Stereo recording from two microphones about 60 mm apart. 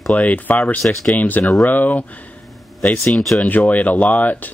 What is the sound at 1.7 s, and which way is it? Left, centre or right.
Speech, left.